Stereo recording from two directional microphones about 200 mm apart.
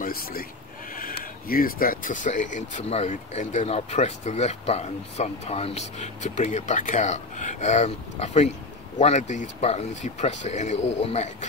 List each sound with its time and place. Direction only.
0.0 s speech: 45° left (ahead or behind); by 11.2 s 30° left (ahead or behind)